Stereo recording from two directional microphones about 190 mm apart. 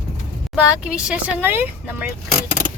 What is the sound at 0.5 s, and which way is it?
Speech, 5° right (ahead or behind).